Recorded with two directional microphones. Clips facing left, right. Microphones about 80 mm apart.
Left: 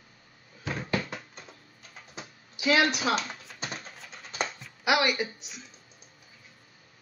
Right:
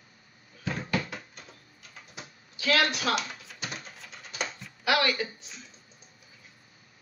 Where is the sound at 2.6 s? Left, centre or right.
Centre.